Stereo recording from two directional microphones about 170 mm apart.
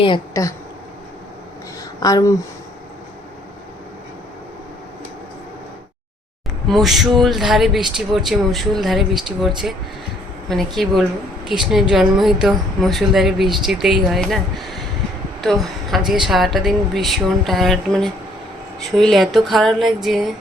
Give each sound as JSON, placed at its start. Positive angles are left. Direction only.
{"t": 0.0, "sound": "a woman's voice", "side_deg": 25}
{"t": 2.0, "sound": "a woman's voice", "side_deg": 20}
{"t": 6.7, "sound": "a woman's voice", "side_deg": 0}
{"t": 10.5, "sound": "a woman's voice", "side_deg": 0}
{"t": 15.4, "sound": "a woman's voice", "side_deg": 0}